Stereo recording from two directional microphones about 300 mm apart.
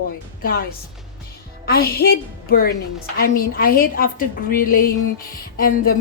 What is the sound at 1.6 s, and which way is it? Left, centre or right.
A woman's voice, left.